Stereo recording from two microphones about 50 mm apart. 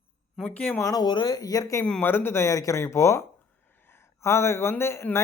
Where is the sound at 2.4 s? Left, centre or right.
Left.